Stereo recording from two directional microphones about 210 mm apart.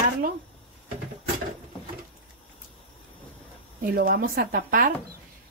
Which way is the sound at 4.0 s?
45° right (ahead or behind).